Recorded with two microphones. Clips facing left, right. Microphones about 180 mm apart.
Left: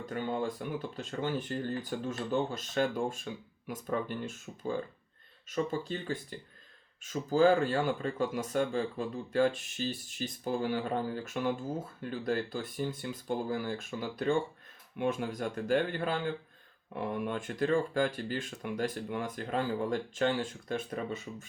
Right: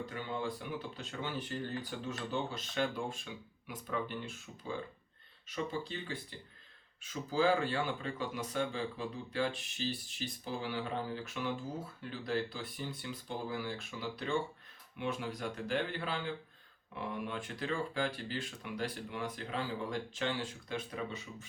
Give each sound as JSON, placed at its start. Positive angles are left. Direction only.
{"t": 0.0, "sound": "speech", "side_deg": 50}